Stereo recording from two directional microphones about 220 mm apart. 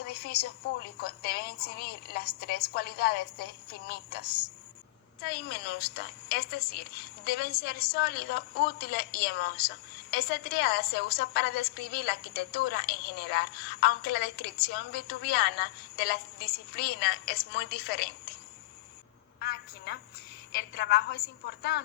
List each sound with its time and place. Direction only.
0.0 s a woman's voice: 45° left (ahead or behind)
19.4 s a woman's voice: 45° left (ahead or behind)